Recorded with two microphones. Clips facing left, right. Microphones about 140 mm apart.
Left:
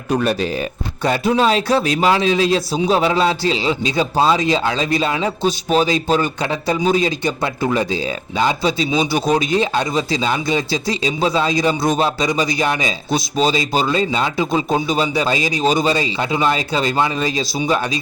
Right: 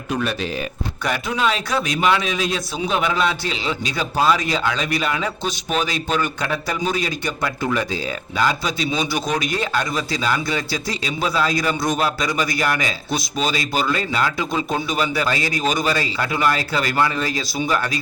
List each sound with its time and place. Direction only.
0.1 s a man's voice: 40° left (ahead or behind); by 17.9 s 20° left (ahead or behind)